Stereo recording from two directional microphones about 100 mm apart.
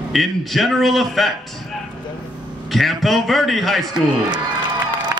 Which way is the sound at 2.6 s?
Centre (ahead or behind).